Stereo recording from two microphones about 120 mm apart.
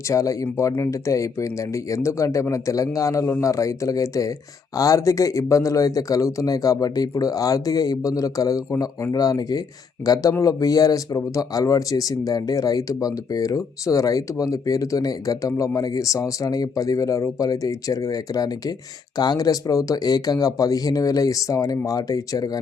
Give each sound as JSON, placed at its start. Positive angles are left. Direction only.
{"t": 0.1, "sound": "speech", "side_deg": 25}